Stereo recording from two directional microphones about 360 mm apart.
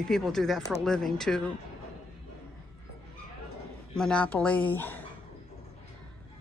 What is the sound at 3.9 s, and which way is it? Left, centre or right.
Speech, centre.